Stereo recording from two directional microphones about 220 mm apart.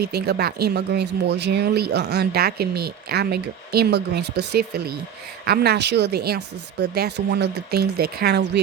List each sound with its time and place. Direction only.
0.0 s speech: 45° right (ahead or behind)